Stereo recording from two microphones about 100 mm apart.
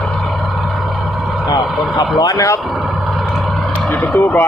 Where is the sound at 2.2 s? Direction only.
40° left (ahead or behind).